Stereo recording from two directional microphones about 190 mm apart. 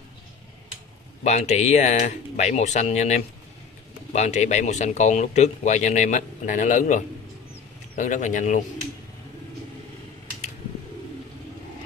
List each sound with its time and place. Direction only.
1.2 s speech: 35° left (ahead or behind)